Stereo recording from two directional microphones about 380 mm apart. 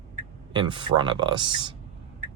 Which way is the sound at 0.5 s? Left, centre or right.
Centre.